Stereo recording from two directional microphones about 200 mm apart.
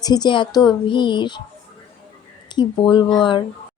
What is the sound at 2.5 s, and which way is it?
Speech, 20° left (ahead or behind).